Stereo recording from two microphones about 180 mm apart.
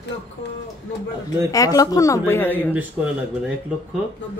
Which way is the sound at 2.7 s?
5° right (ahead or behind).